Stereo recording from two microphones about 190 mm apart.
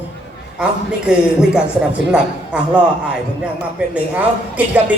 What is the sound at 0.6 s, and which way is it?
A man's voice, 5° right (ahead or behind).